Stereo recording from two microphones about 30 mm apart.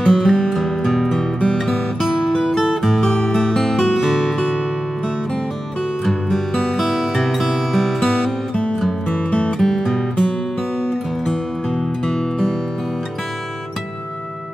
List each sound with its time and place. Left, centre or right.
0.0 s music: centre
1.4 s guitar: centre
2.2 s music: centre
3.0 s music: centre
3.8 s music: centre
6.0 s music: centre
6.8 s music: centre
7.7 s music: centre
9.1 s music: left
9.6 s music: centre
12.1 s music: centre